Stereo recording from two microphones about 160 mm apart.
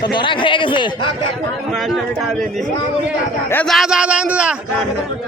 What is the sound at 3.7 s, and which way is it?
A man's voice, 5° right (ahead or behind).